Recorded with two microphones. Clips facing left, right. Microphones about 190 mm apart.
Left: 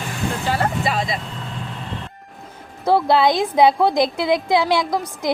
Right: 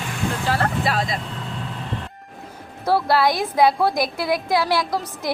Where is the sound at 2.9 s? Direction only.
20° left (ahead or behind).